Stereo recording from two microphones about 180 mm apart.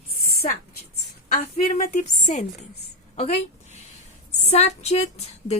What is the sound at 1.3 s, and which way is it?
A woman's voice, 45° left (ahead or behind).